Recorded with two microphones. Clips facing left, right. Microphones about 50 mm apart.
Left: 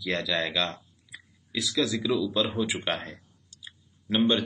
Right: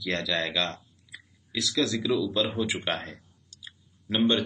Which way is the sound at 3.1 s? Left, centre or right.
Centre.